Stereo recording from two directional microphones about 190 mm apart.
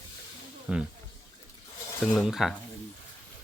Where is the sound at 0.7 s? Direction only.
5° right (ahead or behind).